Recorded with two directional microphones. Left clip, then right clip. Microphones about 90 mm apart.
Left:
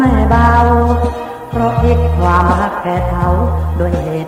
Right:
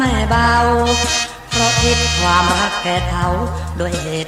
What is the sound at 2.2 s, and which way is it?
Music, 30° right (ahead or behind).